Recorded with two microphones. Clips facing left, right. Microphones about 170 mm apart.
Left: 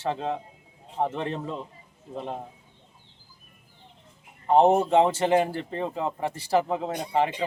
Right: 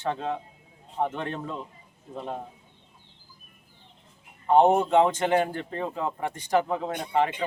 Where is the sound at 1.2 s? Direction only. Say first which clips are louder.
Left 2 dB; 30° left (ahead or behind).